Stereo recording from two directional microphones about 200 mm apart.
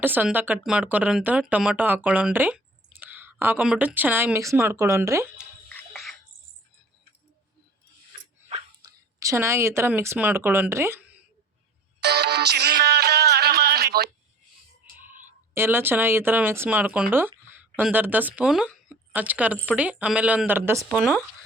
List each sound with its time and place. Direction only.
0.0 s speech: 10° right (ahead or behind)
5.6 s a sound: 5° left (ahead or behind)
8.4 s a sound: 30° right (ahead or behind)
9.2 s speech: 15° right (ahead or behind)
11.9 s music: 55° right (ahead or behind)
15.5 s speech: 10° right (ahead or behind)
20.9 s speech: centre (ahead or behind)